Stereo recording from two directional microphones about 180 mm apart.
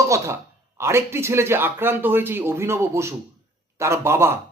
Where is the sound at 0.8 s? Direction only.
15° right (ahead or behind).